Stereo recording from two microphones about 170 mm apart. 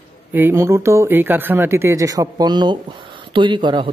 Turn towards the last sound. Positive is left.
turn(degrees=-25)  # may be behind; listen again after turning